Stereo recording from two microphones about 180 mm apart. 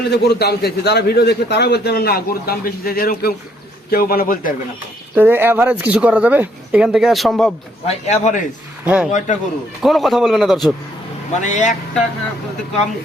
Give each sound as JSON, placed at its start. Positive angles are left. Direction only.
{"t": 0.1, "sound": "a man's voice", "side_deg": 65}
{"t": 5.1, "sound": "speech", "side_deg": -10}
{"t": 7.9, "sound": "a man's voice", "side_deg": 40}
{"t": 8.8, "sound": "a man's voice", "side_deg": -5}
{"t": 9.1, "sound": "a man's voice", "side_deg": 40}
{"t": 9.8, "sound": "a man's voice", "side_deg": 0}
{"t": 11.3, "sound": "speech", "side_deg": 40}